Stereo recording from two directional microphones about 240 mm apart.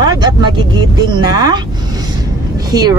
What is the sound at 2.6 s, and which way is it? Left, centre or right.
Speech, centre.